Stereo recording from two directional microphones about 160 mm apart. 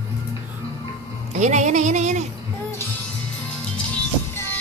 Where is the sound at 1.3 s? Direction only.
50° right (ahead or behind).